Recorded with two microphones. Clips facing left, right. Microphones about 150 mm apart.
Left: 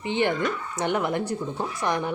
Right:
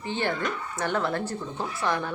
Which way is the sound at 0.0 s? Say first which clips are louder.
Left 4 dB; 15° left (ahead or behind).